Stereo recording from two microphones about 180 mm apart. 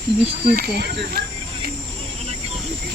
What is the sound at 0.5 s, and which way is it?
Speech, 55° right (ahead or behind).